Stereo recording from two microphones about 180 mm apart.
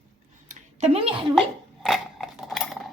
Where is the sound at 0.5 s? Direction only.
35° right (ahead or behind).